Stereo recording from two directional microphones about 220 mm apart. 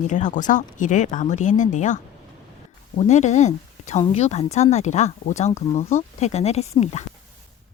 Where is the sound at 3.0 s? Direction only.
30° left (ahead or behind).